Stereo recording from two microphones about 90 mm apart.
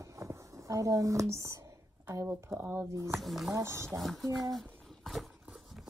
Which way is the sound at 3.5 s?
30° right (ahead or behind).